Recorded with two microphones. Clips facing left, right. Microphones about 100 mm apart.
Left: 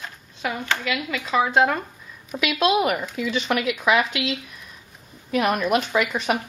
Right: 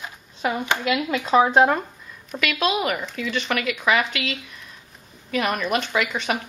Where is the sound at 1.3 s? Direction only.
30° right (ahead or behind).